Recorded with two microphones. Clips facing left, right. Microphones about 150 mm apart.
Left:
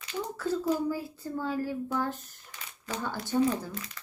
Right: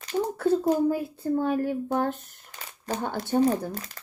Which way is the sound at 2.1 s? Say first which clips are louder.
Right 2 dB; 35° right (ahead or behind).